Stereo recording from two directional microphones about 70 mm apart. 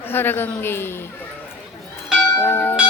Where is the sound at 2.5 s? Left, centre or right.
Left.